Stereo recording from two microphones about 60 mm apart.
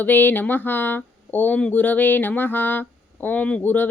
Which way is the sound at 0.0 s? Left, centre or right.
Left.